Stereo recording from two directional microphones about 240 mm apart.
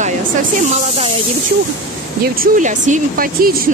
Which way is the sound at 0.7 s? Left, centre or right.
Right.